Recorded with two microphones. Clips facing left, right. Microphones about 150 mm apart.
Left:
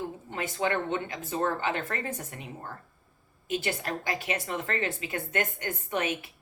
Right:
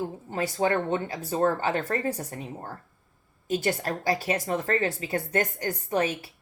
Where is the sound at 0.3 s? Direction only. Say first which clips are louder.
Right 4 dB; 35° right (ahead or behind).